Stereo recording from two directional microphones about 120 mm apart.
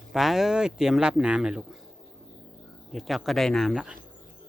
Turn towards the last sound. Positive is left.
turn(degrees=-5)  # may be behind; listen again after turning